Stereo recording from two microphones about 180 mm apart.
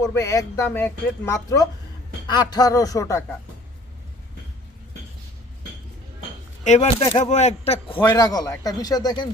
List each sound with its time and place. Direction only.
0.1 s a man's voice: 15° left (ahead or behind)
6.7 s a man's voice: 40° left (ahead or behind); by 9.3 s 25° left (ahead or behind)